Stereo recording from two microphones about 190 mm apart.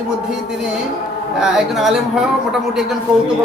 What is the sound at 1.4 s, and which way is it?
A man's voice, centre (ahead or behind).